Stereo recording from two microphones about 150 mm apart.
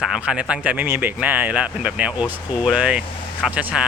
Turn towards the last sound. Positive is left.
turn(degrees=-10)  # may be behind; listen again after turning